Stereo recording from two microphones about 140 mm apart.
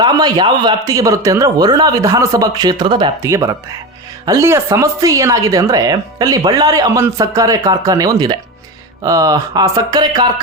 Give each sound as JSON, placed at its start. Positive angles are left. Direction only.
{"t": 0.0, "sound": "speech", "side_deg": -30}
{"t": 3.2, "sound": "speech", "side_deg": -20}